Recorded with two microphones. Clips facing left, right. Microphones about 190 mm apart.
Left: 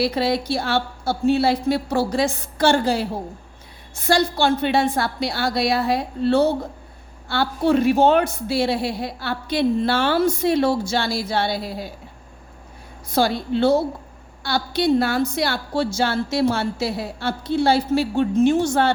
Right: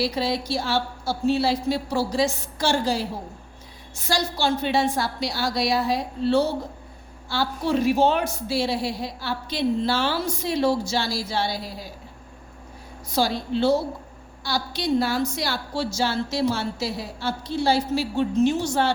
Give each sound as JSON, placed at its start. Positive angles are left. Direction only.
{"t": 0.0, "sound": "a woman's voice", "side_deg": 60}
{"t": 13.1, "sound": "a woman's voice", "side_deg": 55}